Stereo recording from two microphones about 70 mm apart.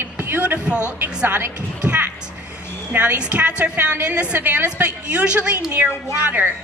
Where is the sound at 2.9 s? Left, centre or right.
Centre.